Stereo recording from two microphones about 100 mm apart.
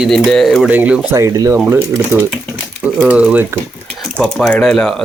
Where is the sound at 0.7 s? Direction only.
15° right (ahead or behind).